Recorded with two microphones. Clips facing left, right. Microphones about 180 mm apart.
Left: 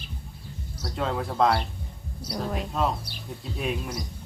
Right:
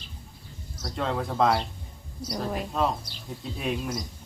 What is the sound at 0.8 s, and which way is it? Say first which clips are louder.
A woman's voice: even; centre (ahead or behind).